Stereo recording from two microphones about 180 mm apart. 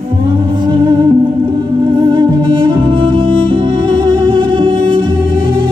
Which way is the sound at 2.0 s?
25° right (ahead or behind).